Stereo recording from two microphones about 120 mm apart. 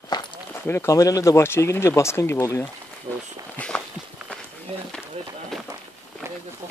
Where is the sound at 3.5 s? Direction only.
10° left (ahead or behind).